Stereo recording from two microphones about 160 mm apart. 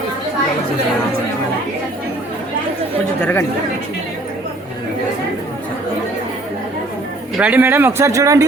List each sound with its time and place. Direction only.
3.2 s speech: 10° left (ahead or behind)
7.3 s speech: 10° right (ahead or behind)